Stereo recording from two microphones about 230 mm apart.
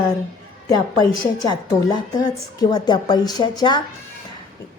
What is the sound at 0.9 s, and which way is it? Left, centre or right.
A woman's voice, centre.